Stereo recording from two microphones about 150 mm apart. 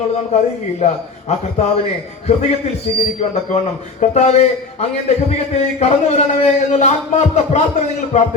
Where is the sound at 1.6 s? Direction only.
45° left (ahead or behind).